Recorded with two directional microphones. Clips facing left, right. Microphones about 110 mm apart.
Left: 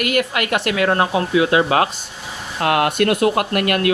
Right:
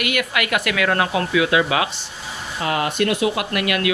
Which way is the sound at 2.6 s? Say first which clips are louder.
Left 4 dB; 60° left (ahead or behind).